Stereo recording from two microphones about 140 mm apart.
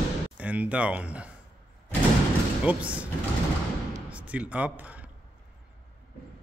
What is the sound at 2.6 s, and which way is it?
Speech, 10° right (ahead or behind).